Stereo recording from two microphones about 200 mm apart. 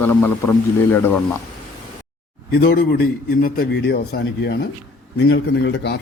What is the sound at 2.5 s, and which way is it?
A man's voice, 50° left (ahead or behind).